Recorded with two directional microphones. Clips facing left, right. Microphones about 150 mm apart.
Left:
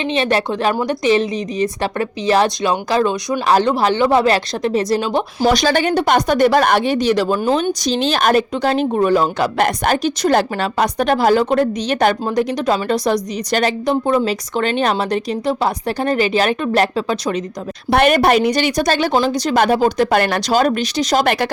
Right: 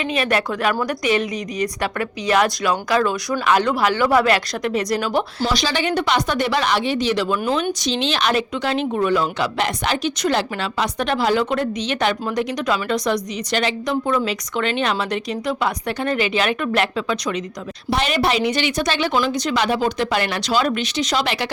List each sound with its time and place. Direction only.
0.0 s a woman's voice: 25° left (ahead or behind)
3.4 s a woman's voice: 35° left (ahead or behind)
5.5 s speech: 50° left (ahead or behind)
13.8 s speech: 30° left (ahead or behind)
17.9 s speech: 55° left (ahead or behind); by 19.5 s 35° left (ahead or behind)
19.5 s speech: 45° left (ahead or behind)